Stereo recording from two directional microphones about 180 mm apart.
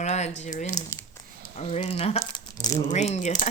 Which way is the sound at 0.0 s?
40° left (ahead or behind).